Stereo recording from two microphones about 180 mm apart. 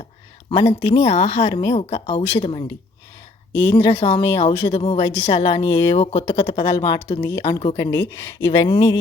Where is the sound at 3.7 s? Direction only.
30° left (ahead or behind).